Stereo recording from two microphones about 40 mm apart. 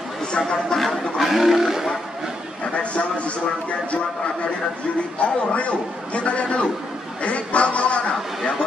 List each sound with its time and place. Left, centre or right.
1.2 s livestock: centre
2.7 s a sound: left
5.2 s a man's voice: left